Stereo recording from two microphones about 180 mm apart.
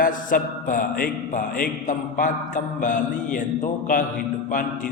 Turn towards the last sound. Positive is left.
turn(degrees=50)  # may be behind; listen again after turning